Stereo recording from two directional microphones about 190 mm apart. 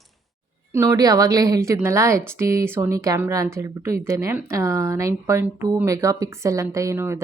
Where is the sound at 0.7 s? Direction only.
15° right (ahead or behind).